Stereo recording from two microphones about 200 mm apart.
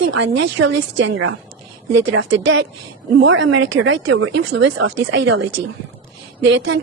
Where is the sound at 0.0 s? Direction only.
70° right (ahead or behind).